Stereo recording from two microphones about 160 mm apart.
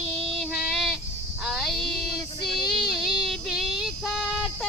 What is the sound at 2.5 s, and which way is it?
Child singing, centre (ahead or behind).